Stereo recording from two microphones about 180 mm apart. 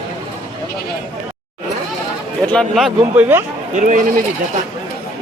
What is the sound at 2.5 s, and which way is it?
Speech, centre (ahead or behind).